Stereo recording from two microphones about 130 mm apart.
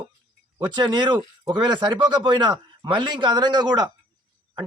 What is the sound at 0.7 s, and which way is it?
A man's voice, 35° right (ahead or behind).